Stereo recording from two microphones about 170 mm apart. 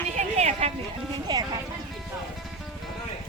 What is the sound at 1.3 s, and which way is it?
Music, 25° right (ahead or behind).